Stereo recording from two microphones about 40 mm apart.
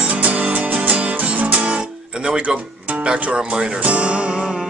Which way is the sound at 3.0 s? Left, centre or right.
Right.